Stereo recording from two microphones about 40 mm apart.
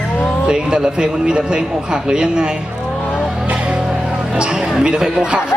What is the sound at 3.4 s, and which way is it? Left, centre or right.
Music, right.